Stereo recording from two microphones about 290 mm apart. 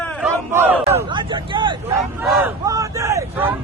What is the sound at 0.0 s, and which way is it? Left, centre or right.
Battle cry, centre.